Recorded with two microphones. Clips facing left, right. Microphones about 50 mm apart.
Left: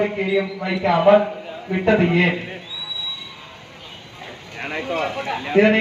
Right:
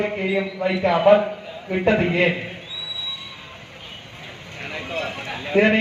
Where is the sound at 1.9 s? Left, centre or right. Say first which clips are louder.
Left 3 dB; centre.